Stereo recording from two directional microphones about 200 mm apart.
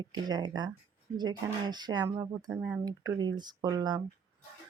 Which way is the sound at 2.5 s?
5° right (ahead or behind).